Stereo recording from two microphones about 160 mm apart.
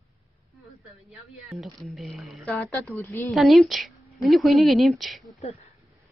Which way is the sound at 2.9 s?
15° left (ahead or behind).